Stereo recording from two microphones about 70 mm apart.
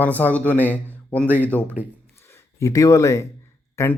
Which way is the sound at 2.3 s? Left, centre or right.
Left.